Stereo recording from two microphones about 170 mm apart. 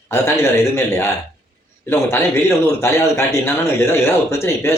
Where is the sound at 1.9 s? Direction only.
15° left (ahead or behind).